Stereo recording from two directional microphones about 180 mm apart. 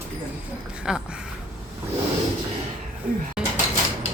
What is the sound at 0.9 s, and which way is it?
Speech, 5° right (ahead or behind).